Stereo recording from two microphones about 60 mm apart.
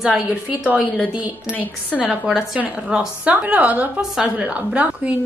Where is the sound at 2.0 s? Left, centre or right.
Centre.